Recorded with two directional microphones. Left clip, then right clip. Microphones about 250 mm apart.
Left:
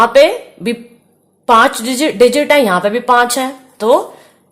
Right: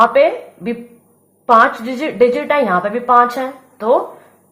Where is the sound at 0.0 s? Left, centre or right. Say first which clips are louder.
Left 3 dB; left.